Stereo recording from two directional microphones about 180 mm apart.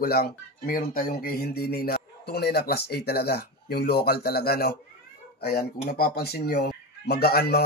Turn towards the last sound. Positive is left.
turn(degrees=60)  # may be behind; listen again after turning